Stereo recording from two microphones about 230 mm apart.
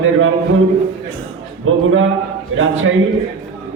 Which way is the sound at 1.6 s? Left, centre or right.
Right.